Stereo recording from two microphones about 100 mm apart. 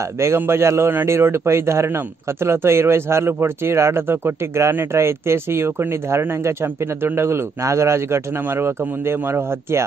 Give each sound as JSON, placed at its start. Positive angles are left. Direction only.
{"t": 0.2, "sound": "a man's voice", "side_deg": -25}